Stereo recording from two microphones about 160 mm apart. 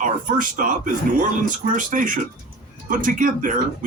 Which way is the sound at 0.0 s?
55° right (ahead or behind).